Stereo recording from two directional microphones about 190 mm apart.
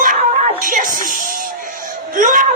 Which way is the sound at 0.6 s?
45° right (ahead or behind).